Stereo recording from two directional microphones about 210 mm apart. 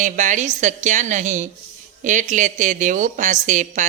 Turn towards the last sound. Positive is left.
turn(degrees=-35)  # may be behind; listen again after turning